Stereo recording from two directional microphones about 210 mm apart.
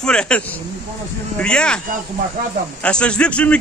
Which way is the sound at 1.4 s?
5° left (ahead or behind).